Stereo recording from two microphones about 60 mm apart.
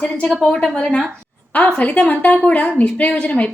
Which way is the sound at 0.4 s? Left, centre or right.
Centre.